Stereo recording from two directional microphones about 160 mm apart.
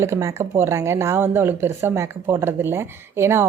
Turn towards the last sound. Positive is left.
turn(degrees=-15)  # may be behind; listen again after turning